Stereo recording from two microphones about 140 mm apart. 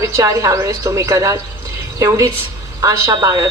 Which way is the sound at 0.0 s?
25° right (ahead or behind).